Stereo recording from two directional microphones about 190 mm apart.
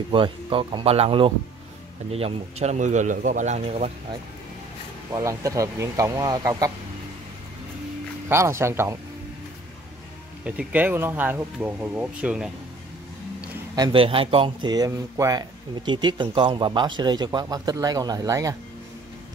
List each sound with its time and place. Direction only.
0.1 s a man's voice: 25° right (ahead or behind)
5.1 s speech: 15° right (ahead or behind)
8.3 s speech: 15° right (ahead or behind)
10.4 s speech: 5° right (ahead or behind)
13.7 s speech: 25° right (ahead or behind)